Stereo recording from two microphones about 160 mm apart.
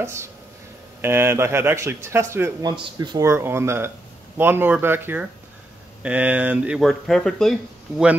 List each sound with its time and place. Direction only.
0.0 s speech: 15° right (ahead or behind)
2.7 s speech: 30° right (ahead or behind); by 7.5 s 5° left (ahead or behind)